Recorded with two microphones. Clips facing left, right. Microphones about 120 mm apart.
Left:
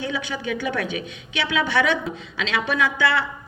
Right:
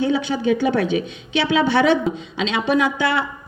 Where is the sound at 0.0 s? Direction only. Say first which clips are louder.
Right 8 dB; 30° right (ahead or behind).